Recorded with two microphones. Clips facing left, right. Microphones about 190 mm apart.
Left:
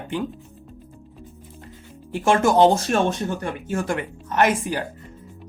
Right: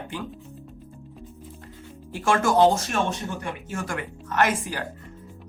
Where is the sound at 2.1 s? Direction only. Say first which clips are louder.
Left 4 dB; 20° left (ahead or behind).